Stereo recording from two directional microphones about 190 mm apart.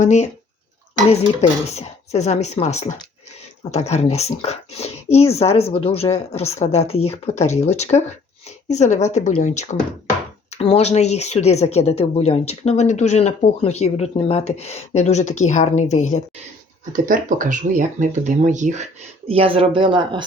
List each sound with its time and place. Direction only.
0.0 s speech: 35° left (ahead or behind)
16.9 s speech: 45° right (ahead or behind); by 20.2 s 25° right (ahead or behind)